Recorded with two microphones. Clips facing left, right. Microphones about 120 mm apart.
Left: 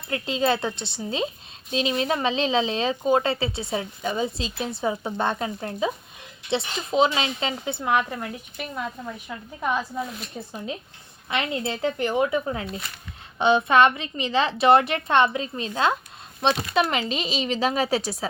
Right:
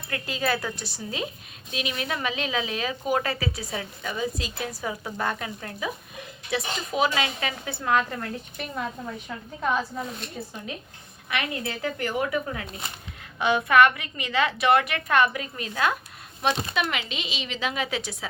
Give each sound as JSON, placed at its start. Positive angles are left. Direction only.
{"t": 0.1, "sound": "speech", "side_deg": 25}
{"t": 8.5, "sound": "speech", "side_deg": 5}
{"t": 11.3, "sound": "speech", "side_deg": 25}